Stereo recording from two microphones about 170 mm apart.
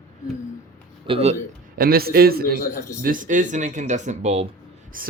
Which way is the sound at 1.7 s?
60° right (ahead or behind).